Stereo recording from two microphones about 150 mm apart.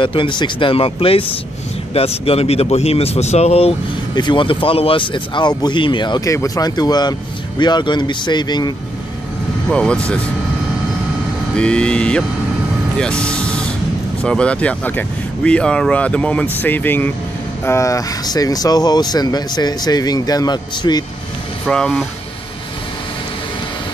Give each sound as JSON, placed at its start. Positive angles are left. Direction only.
{"t": 0.0, "sound": "speech", "side_deg": 35}
{"t": 4.1, "sound": "speech", "side_deg": 30}
{"t": 9.7, "sound": "speech", "side_deg": 5}
{"t": 11.5, "sound": "speech", "side_deg": 5}
{"t": 12.9, "sound": "vehicle", "side_deg": 5}
{"t": 14.2, "sound": "speech", "side_deg": 5}
{"t": 21.6, "sound": "speech", "side_deg": 5}